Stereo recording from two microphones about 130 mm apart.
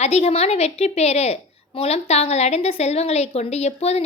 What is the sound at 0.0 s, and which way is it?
A woman's voice, 55° left (ahead or behind).